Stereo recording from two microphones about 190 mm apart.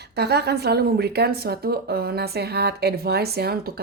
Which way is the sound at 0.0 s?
60° right (ahead or behind).